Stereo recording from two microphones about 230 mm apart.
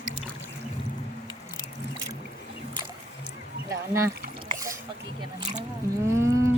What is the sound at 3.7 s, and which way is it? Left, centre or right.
Speech, centre.